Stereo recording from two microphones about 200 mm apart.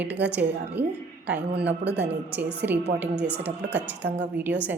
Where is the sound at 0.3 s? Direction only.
10° right (ahead or behind).